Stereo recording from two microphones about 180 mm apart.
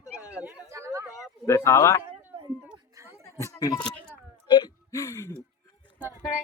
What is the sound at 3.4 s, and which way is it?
Speech, 15° left (ahead or behind).